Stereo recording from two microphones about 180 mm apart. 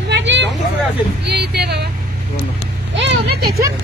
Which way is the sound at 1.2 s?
65° right (ahead or behind).